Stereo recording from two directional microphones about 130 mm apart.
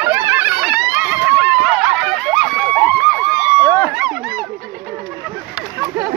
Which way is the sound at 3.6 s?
25° left (ahead or behind).